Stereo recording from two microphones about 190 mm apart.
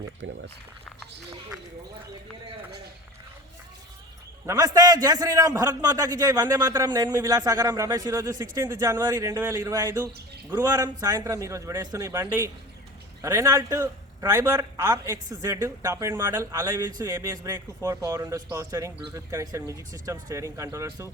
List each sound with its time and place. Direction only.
0.2 s speech: 70° right (ahead or behind)
4.4 s a man's voice: 20° right (ahead or behind)